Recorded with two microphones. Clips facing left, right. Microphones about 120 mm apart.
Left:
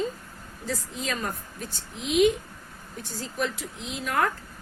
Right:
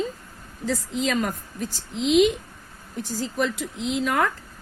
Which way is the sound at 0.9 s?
90° right.